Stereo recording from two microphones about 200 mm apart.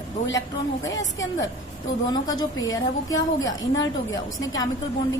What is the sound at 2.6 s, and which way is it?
Speech, 75° left (ahead or behind).